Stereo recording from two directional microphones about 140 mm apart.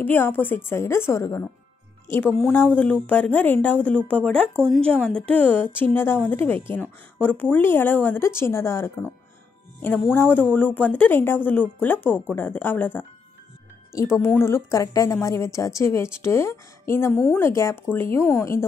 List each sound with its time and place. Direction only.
0.0 s a woman's voice: 15° left (ahead or behind)